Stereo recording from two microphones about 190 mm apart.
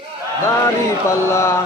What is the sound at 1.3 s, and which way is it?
Music, 15° left (ahead or behind).